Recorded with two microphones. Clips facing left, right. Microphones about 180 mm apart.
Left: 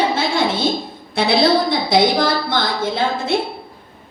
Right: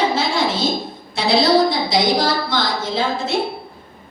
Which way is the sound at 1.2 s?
55° left (ahead or behind).